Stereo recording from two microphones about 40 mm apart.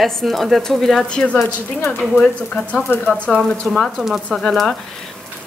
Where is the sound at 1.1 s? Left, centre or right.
Left.